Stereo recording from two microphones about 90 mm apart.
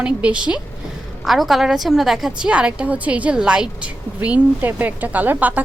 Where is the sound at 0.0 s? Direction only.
15° right (ahead or behind).